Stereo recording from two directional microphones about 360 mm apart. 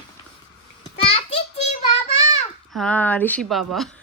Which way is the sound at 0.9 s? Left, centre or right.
Centre.